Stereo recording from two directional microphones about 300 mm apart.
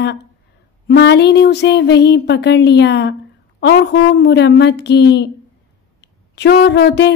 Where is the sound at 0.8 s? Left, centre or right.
Left.